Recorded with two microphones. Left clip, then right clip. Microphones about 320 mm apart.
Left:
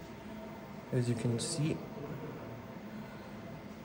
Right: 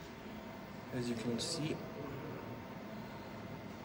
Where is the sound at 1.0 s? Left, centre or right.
Centre.